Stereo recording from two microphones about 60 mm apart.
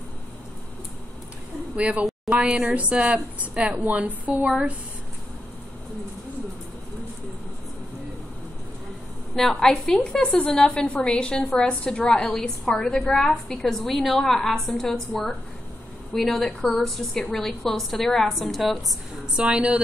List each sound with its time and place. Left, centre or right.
1.8 s a woman's voice: right
4.5 s speech: centre
9.3 s a woman's voice: centre
10.3 s a woman's voice: centre
19.3 s speech: centre